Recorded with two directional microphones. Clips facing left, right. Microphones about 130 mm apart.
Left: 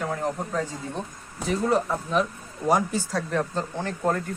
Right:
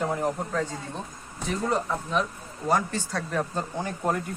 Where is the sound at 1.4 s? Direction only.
Centre (ahead or behind).